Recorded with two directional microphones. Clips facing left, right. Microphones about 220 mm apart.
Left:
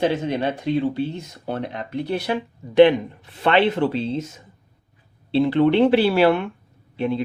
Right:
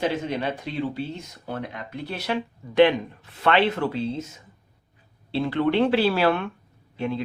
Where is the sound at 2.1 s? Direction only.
15° left (ahead or behind).